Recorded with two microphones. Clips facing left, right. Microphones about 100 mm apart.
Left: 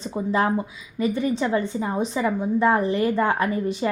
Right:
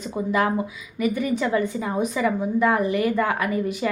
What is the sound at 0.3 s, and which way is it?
A woman's voice, 30° left (ahead or behind).